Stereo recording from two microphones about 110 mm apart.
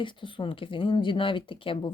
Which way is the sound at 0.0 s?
50° left (ahead or behind).